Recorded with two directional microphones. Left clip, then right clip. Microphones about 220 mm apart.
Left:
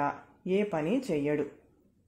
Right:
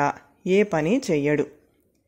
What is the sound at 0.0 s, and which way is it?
Speech, 40° right (ahead or behind).